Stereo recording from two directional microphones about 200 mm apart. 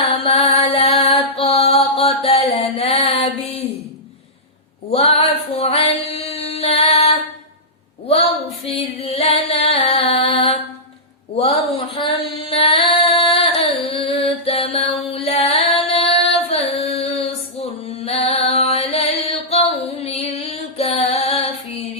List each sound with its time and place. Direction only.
0.3 s music: 30° left (ahead or behind)
4.9 s a woman's voice: 30° left (ahead or behind)
5.5 s female singing: 30° left (ahead or behind)
11.3 s a sound: 30° left (ahead or behind)
12.4 s singing: 25° left (ahead or behind)